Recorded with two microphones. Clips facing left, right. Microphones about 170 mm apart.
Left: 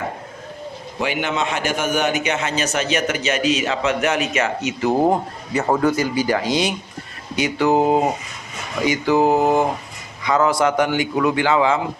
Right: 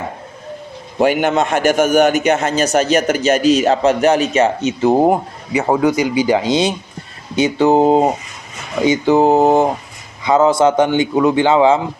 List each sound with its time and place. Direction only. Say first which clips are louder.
0.9 s a man's voice: right 9 dB; 50° right (ahead or behind); by 11.8 s 25° right (ahead or behind)